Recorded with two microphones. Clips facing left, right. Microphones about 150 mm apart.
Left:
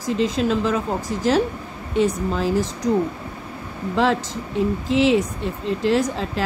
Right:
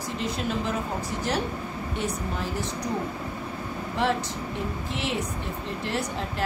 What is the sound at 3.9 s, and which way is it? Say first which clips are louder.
Speech: left 6 dB; 90° left.